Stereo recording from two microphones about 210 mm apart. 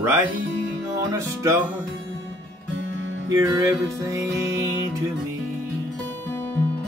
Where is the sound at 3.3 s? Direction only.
15° right (ahead or behind).